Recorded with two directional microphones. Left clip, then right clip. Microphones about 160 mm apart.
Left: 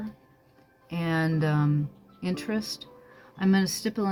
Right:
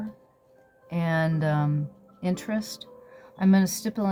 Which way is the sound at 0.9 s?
45° right (ahead or behind).